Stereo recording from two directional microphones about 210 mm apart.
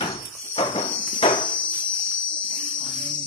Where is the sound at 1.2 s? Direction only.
25° left (ahead or behind).